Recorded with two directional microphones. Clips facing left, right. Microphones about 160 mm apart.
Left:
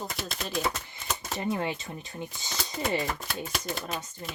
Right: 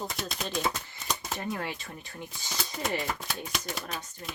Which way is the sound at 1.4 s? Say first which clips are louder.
Left 4 dB; 20° left (ahead or behind).